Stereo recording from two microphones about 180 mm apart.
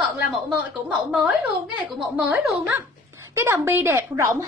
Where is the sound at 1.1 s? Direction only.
10° right (ahead or behind).